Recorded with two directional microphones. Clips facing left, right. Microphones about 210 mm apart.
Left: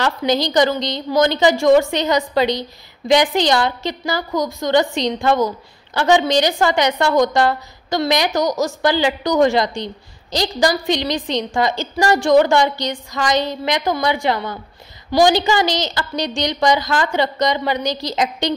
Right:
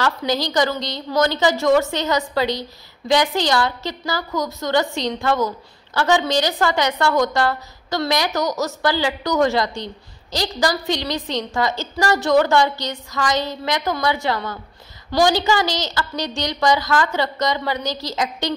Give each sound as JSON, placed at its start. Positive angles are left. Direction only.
{"t": 0.2, "sound": "a woman's voice", "side_deg": 20}